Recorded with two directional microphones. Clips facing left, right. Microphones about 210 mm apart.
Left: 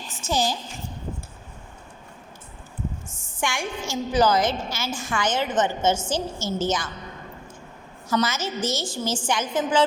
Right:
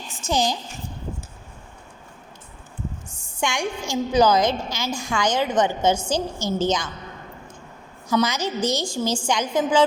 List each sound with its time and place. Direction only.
0.3 s a woman's voice: 15° right (ahead or behind)
3.3 s a woman's voice: 15° right (ahead or behind)
4.9 s a woman's voice: 5° left (ahead or behind)
5.1 s a woman's voice: 10° right (ahead or behind)
8.1 s a woman's voice: 15° right (ahead or behind)